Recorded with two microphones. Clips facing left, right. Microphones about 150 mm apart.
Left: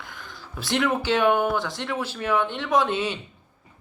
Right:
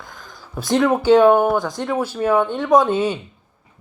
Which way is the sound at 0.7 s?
40° right (ahead or behind).